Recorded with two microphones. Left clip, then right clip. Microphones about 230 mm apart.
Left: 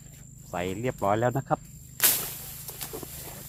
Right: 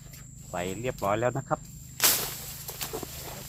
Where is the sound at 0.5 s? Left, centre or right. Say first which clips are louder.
Left 1 dB; left.